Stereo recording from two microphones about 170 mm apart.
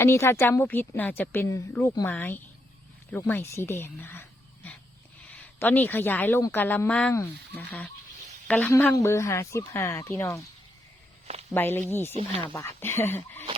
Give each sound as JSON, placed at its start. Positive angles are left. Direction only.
{"t": 0.0, "sound": "a woman's voice", "side_deg": 15}
{"t": 11.5, "sound": "a woman's voice", "side_deg": 10}